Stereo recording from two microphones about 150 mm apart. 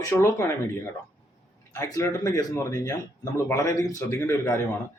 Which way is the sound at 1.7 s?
20° left (ahead or behind).